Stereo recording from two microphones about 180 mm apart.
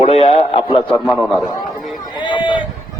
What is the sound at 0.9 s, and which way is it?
Speech, 5° left (ahead or behind).